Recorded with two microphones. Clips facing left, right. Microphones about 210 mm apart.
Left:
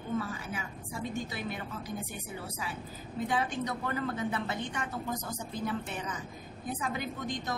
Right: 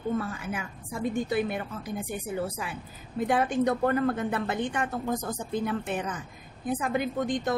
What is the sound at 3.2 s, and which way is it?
A woman's voice, 55° right (ahead or behind).